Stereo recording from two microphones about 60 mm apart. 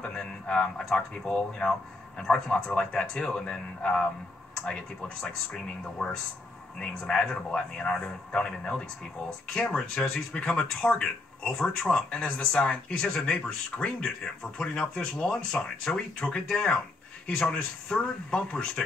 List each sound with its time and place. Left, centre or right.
0.5 s speech: centre
5.2 s speech: centre
7.7 s speech: centre
12.1 s speech: centre